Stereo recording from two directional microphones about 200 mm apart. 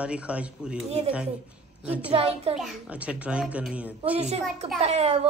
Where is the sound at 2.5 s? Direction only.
5° right (ahead or behind).